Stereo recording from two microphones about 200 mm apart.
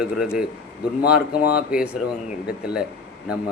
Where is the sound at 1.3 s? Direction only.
50° left (ahead or behind).